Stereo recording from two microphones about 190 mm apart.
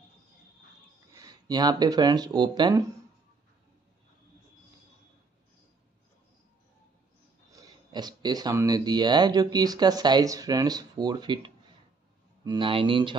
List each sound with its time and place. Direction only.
1.1 s speech: 20° right (ahead or behind)
7.5 s speech: 20° right (ahead or behind)